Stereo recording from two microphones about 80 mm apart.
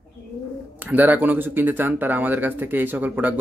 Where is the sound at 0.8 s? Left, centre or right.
Right.